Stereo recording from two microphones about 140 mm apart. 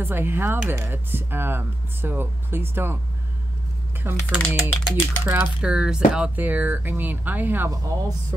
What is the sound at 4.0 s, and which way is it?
Speech, 15° right (ahead or behind).